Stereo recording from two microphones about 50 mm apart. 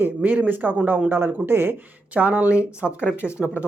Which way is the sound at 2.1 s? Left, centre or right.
Right.